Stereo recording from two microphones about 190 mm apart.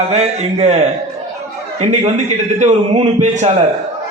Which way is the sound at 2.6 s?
40° right (ahead or behind).